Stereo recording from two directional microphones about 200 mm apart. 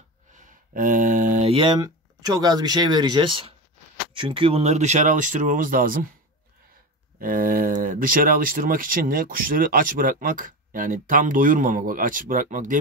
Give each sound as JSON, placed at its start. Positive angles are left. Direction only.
{"t": 0.3, "sound": "a sound", "side_deg": -40}
{"t": 1.5, "sound": "speech", "side_deg": -25}
{"t": 7.2, "sound": "speech", "side_deg": -45}